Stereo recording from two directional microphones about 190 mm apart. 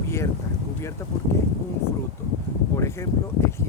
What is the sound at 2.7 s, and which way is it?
Speech, 15° left (ahead or behind).